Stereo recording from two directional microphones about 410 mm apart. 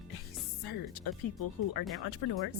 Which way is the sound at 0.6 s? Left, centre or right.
Left.